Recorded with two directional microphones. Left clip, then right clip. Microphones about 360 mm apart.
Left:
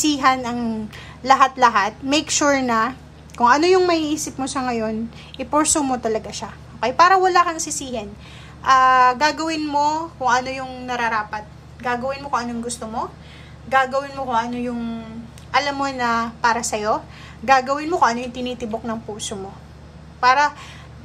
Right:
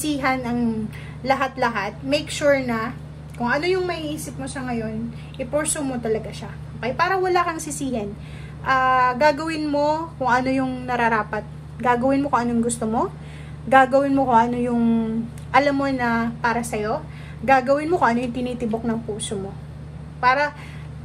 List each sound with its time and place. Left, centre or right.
0.0 s a woman's voice: centre
5.4 s a woman's voice: centre
20.2 s a woman's voice: centre